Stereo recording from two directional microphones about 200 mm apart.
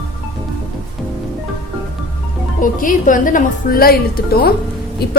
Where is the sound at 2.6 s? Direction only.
40° left (ahead or behind).